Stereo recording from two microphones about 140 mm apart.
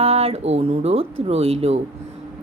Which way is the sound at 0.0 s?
45° right (ahead or behind).